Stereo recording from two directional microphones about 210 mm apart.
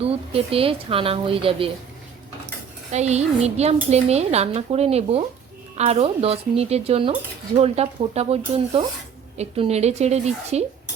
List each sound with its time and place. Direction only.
0.0 s speech: 25° right (ahead or behind)
2.9 s speech: 30° right (ahead or behind)
9.4 s speech: 30° right (ahead or behind)